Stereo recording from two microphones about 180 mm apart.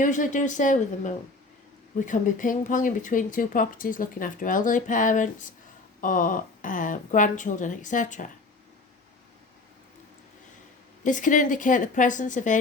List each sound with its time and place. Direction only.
0.0 s speech: 45° left (ahead or behind)
11.0 s speech: 45° left (ahead or behind)